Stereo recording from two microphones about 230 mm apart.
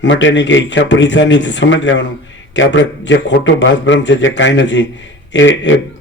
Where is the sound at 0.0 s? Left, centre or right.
Left.